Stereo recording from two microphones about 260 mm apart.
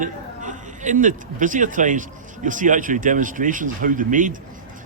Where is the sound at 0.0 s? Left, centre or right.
Right.